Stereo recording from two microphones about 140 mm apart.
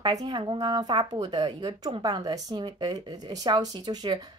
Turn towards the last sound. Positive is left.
turn(degrees=-30)  # may be behind; listen again after turning